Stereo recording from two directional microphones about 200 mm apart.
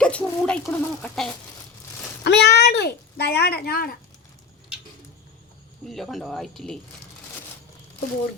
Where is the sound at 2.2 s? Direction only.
60° left (ahead or behind).